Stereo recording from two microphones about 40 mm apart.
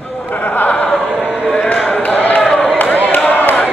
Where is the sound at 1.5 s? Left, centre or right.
Left.